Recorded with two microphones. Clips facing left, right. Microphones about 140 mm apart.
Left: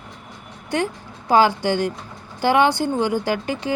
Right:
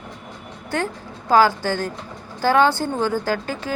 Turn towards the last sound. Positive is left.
turn(degrees=20)  # may be behind; listen again after turning